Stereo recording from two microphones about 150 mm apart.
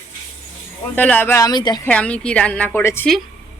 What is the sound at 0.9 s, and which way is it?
Speech, 10° left (ahead or behind).